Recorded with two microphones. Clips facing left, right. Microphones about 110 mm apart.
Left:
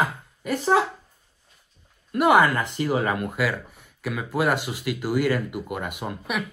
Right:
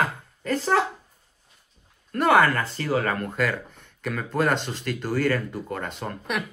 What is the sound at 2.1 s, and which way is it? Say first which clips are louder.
Speech: left 1 dB; 15° left (ahead or behind).